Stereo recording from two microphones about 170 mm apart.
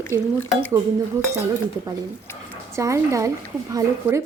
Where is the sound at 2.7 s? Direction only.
15° right (ahead or behind).